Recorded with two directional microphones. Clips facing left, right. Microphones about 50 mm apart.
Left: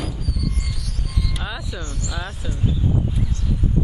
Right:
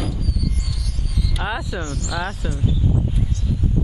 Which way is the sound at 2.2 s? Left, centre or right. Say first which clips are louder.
Right 4 dB; right.